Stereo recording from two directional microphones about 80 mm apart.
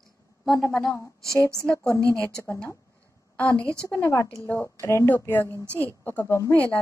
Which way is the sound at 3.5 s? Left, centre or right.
Right.